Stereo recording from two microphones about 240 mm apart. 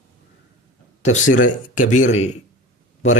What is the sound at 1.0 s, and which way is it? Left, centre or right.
Speech, left.